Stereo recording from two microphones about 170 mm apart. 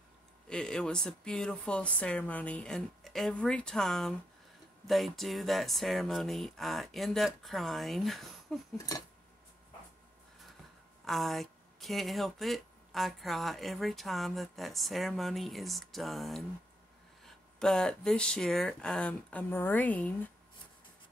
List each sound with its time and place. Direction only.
0.5 s speech: 5° left (ahead or behind)
8.7 s a sound: 20° left (ahead or behind)
11.1 s speech: centre (ahead or behind)